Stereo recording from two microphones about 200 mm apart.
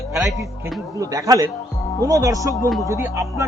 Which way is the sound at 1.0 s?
15° right (ahead or behind).